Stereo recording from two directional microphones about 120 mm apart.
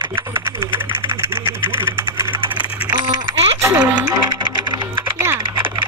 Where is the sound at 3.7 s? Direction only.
10° right (ahead or behind).